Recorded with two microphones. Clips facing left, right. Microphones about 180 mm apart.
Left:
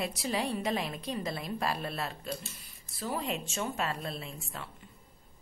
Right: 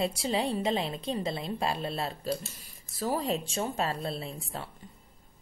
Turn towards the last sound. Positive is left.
turn(degrees=-30)  # may be behind; listen again after turning